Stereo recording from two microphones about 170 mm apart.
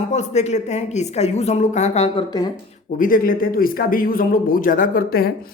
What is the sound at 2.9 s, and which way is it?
Speech, 55° left (ahead or behind).